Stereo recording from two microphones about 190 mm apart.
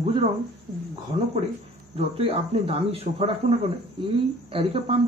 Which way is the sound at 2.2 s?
30° right (ahead or behind).